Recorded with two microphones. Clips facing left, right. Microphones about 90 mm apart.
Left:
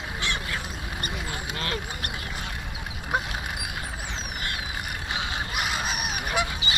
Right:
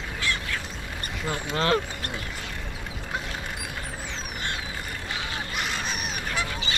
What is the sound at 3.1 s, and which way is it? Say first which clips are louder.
Vehicle: left 6 dB; 15° left (ahead or behind).